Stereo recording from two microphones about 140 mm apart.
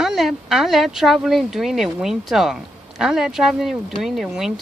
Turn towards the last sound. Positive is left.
turn(degrees=0)  # may be behind; listen again after turning